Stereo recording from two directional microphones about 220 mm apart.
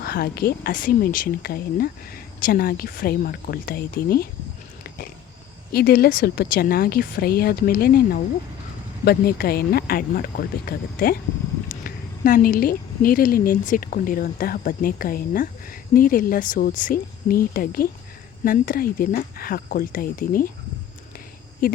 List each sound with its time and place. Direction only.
0.0 s speech: 45° left (ahead or behind)
5.7 s a woman's voice: 45° left (ahead or behind)
21.6 s speech: 40° left (ahead or behind)